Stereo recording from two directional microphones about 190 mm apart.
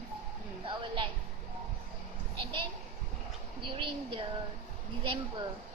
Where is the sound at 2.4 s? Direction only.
25° right (ahead or behind).